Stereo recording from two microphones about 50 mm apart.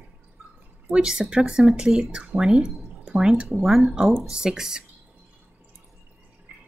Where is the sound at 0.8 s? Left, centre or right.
Centre.